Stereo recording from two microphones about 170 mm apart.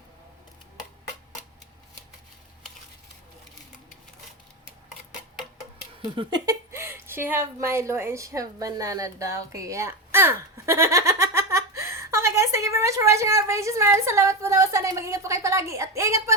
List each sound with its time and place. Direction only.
6.1 s speech: 25° right (ahead or behind)